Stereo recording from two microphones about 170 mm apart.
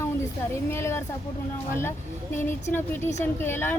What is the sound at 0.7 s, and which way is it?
Speech, 15° left (ahead or behind).